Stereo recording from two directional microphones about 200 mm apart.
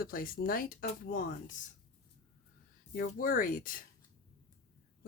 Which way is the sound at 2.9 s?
45° left (ahead or behind).